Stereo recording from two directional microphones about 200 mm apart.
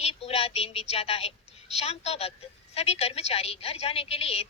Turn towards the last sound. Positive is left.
turn(degrees=30)  # may be behind; listen again after turning